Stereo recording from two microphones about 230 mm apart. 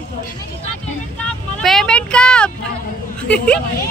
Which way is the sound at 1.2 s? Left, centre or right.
Centre.